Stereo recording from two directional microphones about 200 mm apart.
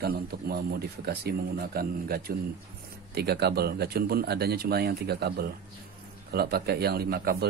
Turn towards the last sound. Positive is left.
turn(degrees=-50)  # may be behind; listen again after turning